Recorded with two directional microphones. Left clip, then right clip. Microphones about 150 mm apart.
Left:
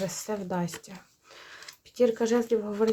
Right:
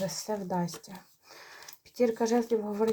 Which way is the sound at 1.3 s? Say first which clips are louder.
Left 3 dB; 10° left (ahead or behind).